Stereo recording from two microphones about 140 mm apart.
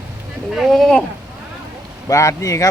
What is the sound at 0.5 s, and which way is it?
Speech, centre (ahead or behind).